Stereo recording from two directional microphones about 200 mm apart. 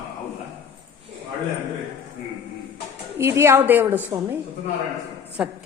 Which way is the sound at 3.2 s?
15° right (ahead or behind).